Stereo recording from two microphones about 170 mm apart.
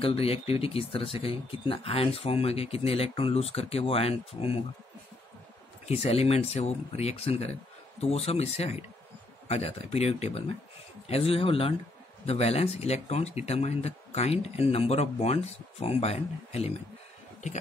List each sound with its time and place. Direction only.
0.0 s speech: 35° left (ahead or behind)
5.9 s speech: 35° left (ahead or behind)